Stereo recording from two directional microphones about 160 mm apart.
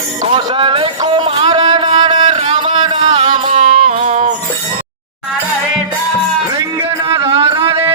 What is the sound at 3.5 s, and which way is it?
Music, 45° right (ahead or behind).